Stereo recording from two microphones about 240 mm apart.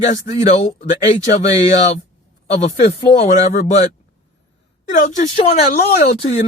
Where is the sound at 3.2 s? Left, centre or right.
Left.